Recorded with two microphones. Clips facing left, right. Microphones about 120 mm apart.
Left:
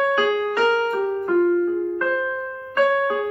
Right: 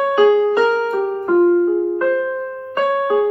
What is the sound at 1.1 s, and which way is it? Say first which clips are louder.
Keyboard: right 6 dB; 30° right (ahead or behind).